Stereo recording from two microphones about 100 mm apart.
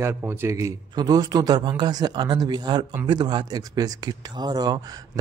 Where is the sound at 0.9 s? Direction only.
40° right (ahead or behind).